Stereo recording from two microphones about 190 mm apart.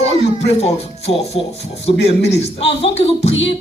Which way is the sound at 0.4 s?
35° left (ahead or behind).